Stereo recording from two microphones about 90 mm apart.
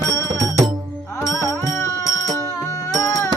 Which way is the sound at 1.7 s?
35° left (ahead or behind).